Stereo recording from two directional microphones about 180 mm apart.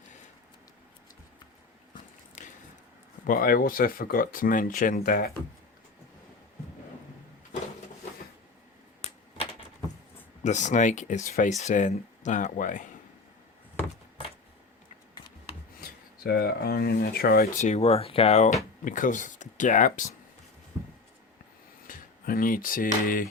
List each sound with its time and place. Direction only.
3.2 s speech: 50° left (ahead or behind)
10.4 s speech: 40° left (ahead or behind)
15.8 s speech: 60° left (ahead or behind)
17.6 s speech: 35° left (ahead or behind)
20.7 s a sound: 15° right (ahead or behind)
21.8 s speech: 50° left (ahead or behind)